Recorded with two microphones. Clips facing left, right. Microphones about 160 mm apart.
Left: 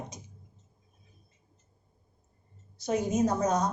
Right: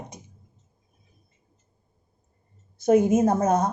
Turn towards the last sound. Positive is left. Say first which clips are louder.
# right 5 dB
turn(degrees=-55)  # may be behind; listen again after turning